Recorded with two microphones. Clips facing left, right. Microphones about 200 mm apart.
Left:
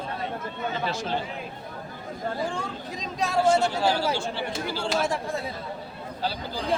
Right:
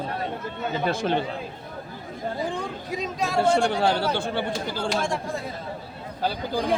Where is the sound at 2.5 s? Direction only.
10° right (ahead or behind).